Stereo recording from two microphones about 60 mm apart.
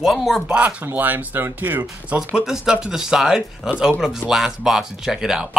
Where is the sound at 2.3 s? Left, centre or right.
Centre.